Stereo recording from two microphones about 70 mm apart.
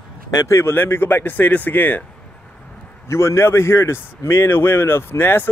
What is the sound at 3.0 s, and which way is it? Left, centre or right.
A man's voice, left.